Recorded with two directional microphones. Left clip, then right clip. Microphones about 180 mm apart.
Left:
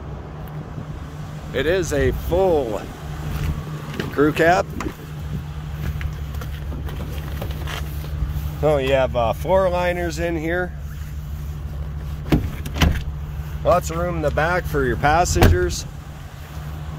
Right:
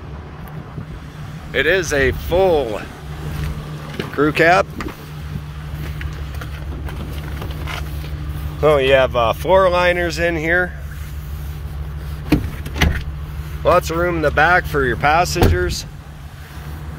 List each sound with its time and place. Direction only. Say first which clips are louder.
1.5 s speech: right 4 dB; 10° left (ahead or behind)
4.1 s speech: right 3 dB; 30° left (ahead or behind)
8.5 s speech: right 5 dB; 5° left (ahead or behind)
13.7 s speech: right 4 dB; centre (ahead or behind); by 15.8 s 25° left (ahead or behind)